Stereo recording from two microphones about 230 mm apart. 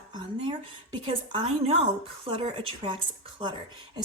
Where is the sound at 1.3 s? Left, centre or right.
Right.